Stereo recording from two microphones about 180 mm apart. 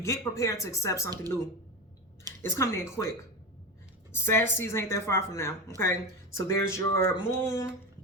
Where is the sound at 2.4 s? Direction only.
15° left (ahead or behind).